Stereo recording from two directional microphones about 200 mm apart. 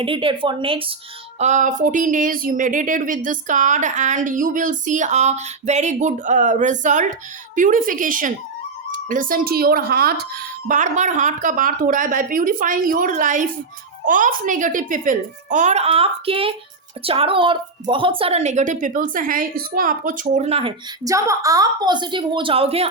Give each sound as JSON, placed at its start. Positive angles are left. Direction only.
{"t": 0.0, "sound": "a woman's voice", "side_deg": -25}
{"t": 1.4, "sound": "speech", "side_deg": -35}
{"t": 10.7, "sound": "speech", "side_deg": -40}
{"t": 21.0, "sound": "a woman's voice", "side_deg": -15}